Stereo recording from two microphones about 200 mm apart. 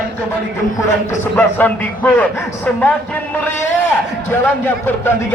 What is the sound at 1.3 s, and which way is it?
A man's voice, 5° left (ahead or behind).